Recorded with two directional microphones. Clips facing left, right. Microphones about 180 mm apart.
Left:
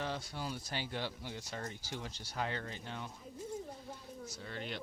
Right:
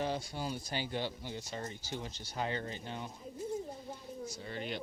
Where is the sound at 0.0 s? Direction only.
5° right (ahead or behind).